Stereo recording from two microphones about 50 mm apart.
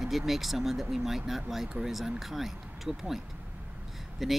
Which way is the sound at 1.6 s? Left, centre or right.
Centre.